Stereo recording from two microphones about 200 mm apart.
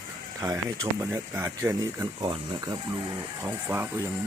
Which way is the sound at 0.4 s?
20° right (ahead or behind).